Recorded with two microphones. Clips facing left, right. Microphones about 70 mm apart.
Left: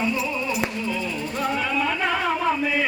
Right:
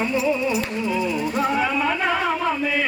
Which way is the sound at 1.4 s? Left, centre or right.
Centre.